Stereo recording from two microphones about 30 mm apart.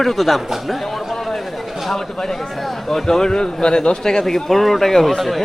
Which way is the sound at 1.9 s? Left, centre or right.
Centre.